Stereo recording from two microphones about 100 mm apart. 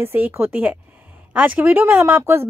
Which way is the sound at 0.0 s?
25° right (ahead or behind).